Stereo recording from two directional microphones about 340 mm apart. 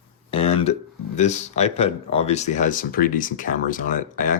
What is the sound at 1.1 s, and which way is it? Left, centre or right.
Speech, centre.